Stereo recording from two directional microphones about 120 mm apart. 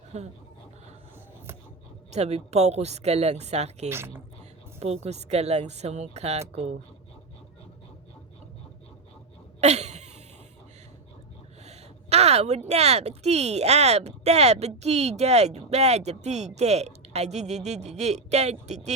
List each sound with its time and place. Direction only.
0.1 s speech: 65° right (ahead or behind)
2.0 s speech: 65° right (ahead or behind)
3.8 s speech: 20° right (ahead or behind)
4.8 s speech: 60° right (ahead or behind)
9.6 s a sound: 65° right (ahead or behind)
11.6 s speech: 65° right (ahead or behind)